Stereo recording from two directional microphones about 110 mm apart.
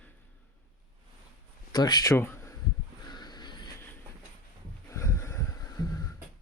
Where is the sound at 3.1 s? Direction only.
40° left (ahead or behind).